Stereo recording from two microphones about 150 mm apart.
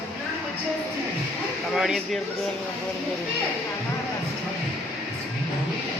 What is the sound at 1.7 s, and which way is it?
Speech, centre (ahead or behind).